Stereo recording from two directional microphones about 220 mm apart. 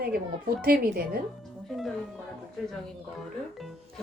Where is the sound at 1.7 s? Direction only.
Centre (ahead or behind).